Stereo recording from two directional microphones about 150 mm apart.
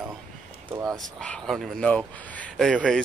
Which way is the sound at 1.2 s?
5° left (ahead or behind).